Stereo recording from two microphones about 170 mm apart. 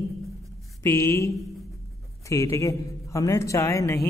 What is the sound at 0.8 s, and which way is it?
A man's voice, 15° left (ahead or behind).